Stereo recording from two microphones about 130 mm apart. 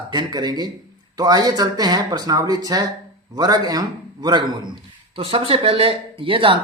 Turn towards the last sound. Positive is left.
turn(degrees=-40)  # may be behind; listen again after turning